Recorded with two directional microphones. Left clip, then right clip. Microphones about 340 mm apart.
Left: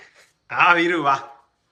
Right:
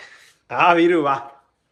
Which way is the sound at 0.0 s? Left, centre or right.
Centre.